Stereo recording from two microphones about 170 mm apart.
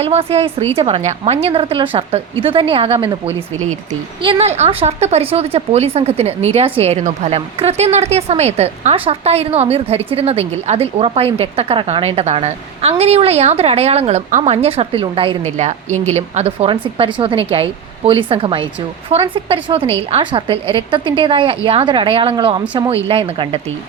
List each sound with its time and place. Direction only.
0.0 s a woman's voice: 35° right (ahead or behind)